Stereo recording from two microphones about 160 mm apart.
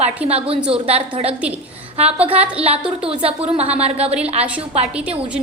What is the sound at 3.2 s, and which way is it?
Speech, 40° right (ahead or behind).